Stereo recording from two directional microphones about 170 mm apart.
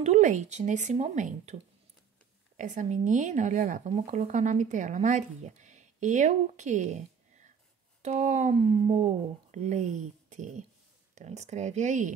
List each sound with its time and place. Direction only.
0.0 s speech: 45° right (ahead or behind)